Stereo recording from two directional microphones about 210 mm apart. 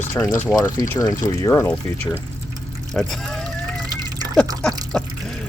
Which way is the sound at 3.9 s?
20° right (ahead or behind).